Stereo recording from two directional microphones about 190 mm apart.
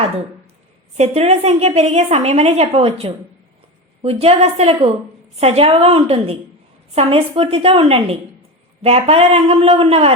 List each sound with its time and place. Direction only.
0.9 s a woman's voice: 35° right (ahead or behind)